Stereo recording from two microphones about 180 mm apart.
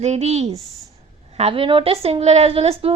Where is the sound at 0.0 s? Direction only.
40° right (ahead or behind).